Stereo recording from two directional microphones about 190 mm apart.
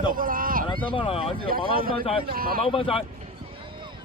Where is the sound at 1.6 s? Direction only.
50° right (ahead or behind).